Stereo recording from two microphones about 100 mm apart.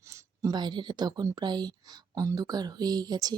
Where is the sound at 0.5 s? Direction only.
50° right (ahead or behind).